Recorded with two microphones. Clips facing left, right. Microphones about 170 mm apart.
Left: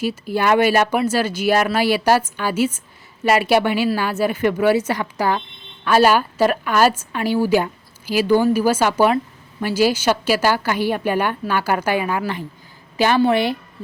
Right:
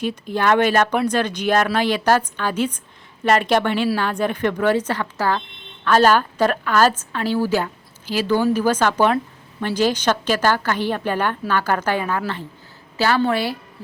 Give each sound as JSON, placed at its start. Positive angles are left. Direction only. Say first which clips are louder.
{"t": 0.0, "sound": "a woman's voice", "louder": "left 1 dB", "side_deg": 5}